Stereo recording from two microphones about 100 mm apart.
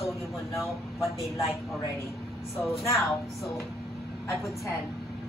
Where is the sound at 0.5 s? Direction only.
Centre (ahead or behind).